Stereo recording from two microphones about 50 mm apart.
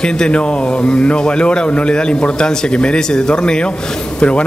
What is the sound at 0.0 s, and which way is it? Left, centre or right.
A man's voice, centre.